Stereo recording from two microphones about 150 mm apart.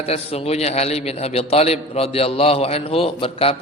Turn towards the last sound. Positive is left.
turn(degrees=40)  # may be behind; listen again after turning